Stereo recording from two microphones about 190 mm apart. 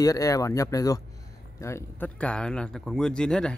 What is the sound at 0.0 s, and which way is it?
Speech, 20° left (ahead or behind).